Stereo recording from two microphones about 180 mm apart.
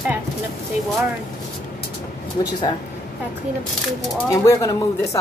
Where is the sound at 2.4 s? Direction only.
25° left (ahead or behind).